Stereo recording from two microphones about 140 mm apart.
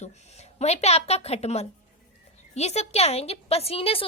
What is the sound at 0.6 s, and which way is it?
Speech, 50° left (ahead or behind).